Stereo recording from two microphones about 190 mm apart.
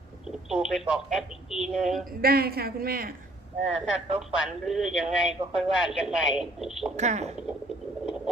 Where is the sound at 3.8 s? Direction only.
30° right (ahead or behind).